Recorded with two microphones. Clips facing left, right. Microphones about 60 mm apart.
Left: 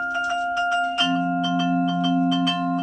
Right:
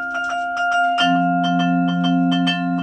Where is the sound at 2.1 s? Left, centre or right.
Right.